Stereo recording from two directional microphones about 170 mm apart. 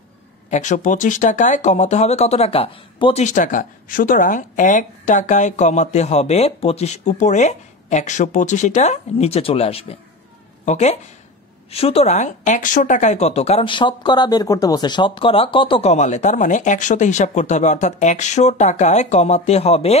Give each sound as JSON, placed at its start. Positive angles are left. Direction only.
{"t": 0.5, "sound": "speech", "side_deg": 45}